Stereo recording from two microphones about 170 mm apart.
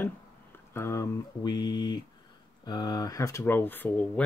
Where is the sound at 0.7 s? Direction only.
15° left (ahead or behind).